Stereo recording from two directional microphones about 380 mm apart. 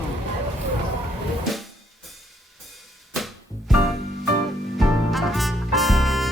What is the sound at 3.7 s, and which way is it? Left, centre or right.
Music, centre.